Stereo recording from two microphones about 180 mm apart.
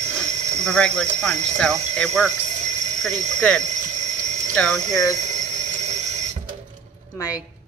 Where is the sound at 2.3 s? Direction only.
40° right (ahead or behind).